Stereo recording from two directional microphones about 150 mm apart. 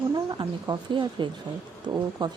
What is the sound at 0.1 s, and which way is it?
Speech, 30° right (ahead or behind).